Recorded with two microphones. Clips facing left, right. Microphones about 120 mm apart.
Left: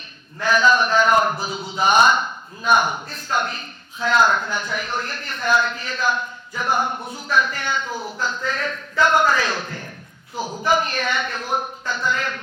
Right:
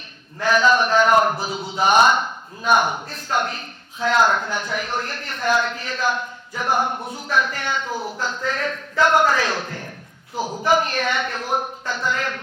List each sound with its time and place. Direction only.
0.4 s a man's voice: 60° right (ahead or behind)
10.6 s a man's voice: 60° right (ahead or behind)